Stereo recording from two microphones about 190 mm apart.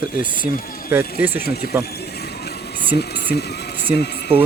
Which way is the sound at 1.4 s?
55° left (ahead or behind).